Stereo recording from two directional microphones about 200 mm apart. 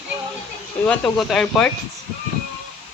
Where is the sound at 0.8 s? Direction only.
Centre (ahead or behind).